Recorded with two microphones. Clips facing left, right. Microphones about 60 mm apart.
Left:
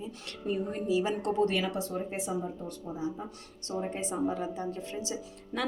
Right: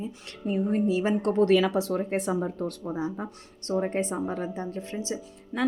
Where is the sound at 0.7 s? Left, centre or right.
Right.